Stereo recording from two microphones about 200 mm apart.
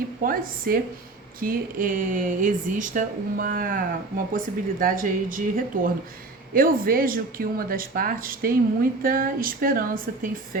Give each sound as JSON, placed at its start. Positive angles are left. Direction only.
{"t": 0.2, "sound": "speech", "side_deg": -45}